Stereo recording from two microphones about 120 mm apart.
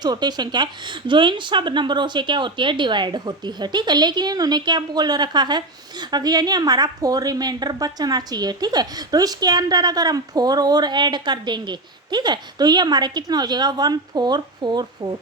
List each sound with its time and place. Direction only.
0.0 s speech: 35° right (ahead or behind)